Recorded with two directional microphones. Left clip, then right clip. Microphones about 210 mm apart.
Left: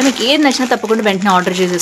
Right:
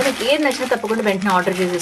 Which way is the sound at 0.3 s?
55° left (ahead or behind).